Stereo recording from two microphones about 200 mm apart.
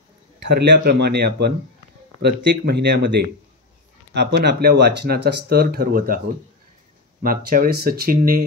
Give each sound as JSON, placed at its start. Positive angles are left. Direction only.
{"t": 0.5, "sound": "speech", "side_deg": -55}
{"t": 7.2, "sound": "speech", "side_deg": -45}